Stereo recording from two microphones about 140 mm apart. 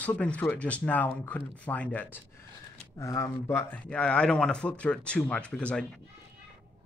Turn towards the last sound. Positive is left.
turn(degrees=10)  # may be behind; listen again after turning